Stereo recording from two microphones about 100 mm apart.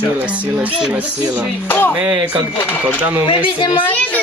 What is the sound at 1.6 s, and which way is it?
Speech, 20° left (ahead or behind).